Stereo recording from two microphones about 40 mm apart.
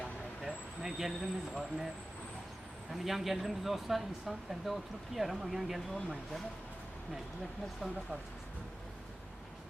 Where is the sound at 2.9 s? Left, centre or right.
Centre.